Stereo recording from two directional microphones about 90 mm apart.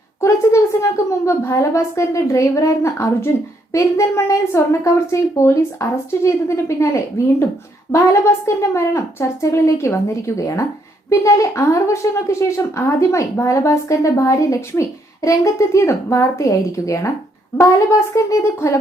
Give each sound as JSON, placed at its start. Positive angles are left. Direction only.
{"t": 0.2, "sound": "a woman's voice", "side_deg": 30}